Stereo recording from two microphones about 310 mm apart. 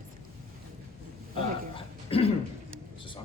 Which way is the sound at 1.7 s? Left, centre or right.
Centre.